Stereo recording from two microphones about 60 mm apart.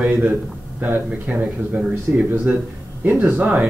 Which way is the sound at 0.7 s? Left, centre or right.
Right.